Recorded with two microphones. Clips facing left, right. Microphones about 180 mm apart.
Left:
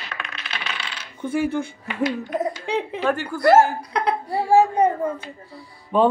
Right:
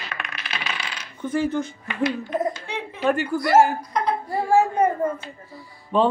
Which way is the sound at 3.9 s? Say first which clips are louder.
Left 1 dB; 70° left (ahead or behind).